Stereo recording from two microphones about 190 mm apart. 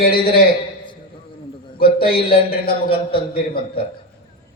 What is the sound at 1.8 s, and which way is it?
A man's voice, 50° left (ahead or behind).